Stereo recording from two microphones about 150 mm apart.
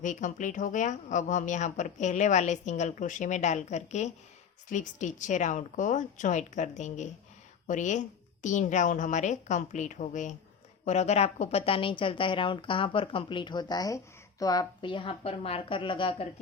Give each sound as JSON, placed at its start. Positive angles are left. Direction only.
{"t": 0.0, "sound": "a woman's voice", "side_deg": 55}